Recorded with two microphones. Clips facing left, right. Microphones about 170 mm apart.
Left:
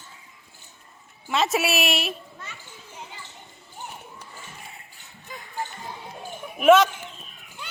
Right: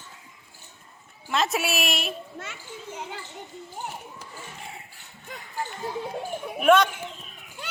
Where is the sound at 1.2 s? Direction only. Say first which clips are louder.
Left 2 dB; centre (ahead or behind).